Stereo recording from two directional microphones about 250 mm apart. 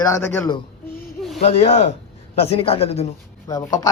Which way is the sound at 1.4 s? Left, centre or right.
Left.